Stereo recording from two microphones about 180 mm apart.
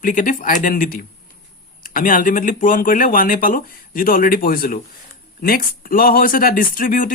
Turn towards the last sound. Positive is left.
turn(degrees=50)  # may be behind; listen again after turning